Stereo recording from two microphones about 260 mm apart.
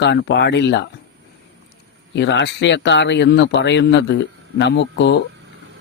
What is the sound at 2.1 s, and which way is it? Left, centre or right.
Speech, left.